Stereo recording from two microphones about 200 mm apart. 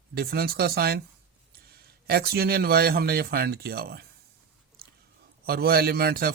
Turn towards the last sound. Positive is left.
turn(degrees=-50)  # may be behind; listen again after turning